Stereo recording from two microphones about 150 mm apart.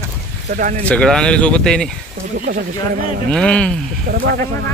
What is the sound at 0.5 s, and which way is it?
Speech, 65° right (ahead or behind).